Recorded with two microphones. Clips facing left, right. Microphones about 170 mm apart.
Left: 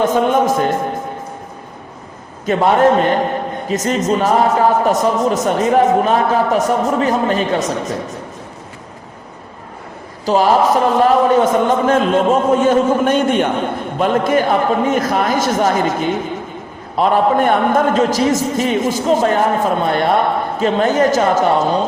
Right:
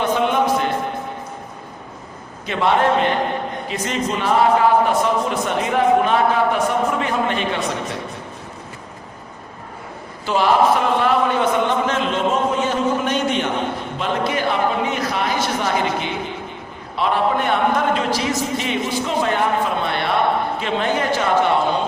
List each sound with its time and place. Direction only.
0.0 s music: 45° left (ahead or behind)
2.5 s a man's voice: 45° left (ahead or behind)
10.2 s a man's voice: 40° left (ahead or behind)